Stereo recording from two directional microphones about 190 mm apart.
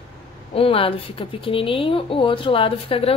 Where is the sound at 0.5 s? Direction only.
30° left (ahead or behind).